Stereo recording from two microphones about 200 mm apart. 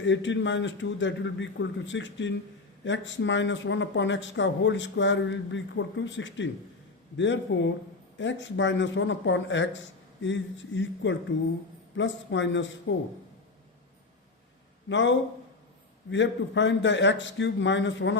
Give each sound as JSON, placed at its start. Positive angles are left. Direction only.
{"t": 0.0, "sound": "a man's voice", "side_deg": 65}
{"t": 14.8, "sound": "a man's voice", "side_deg": 65}